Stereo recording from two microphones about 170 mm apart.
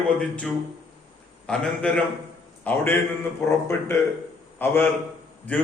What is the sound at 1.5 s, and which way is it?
Mantra, 5° left (ahead or behind).